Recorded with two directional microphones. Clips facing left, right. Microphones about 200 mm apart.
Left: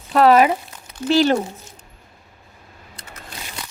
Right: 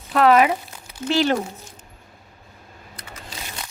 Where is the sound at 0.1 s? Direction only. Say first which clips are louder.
Left 2 dB; 35° left (ahead or behind).